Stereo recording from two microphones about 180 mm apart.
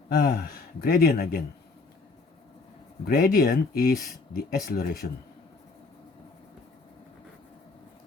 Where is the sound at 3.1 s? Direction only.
55° left (ahead or behind).